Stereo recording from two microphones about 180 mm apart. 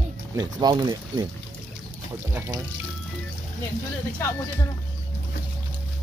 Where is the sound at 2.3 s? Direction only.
15° right (ahead or behind).